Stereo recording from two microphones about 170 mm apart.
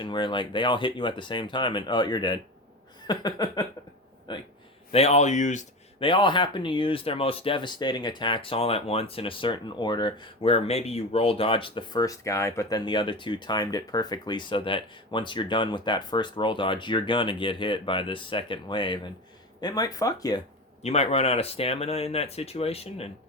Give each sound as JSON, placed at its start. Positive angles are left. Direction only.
{"t": 0.0, "sound": "speech", "side_deg": 25}
{"t": 6.0, "sound": "speech", "side_deg": 30}
{"t": 20.8, "sound": "speech", "side_deg": 40}